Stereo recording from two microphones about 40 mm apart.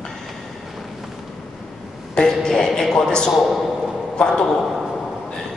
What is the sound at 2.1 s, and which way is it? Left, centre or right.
A man's voice, centre.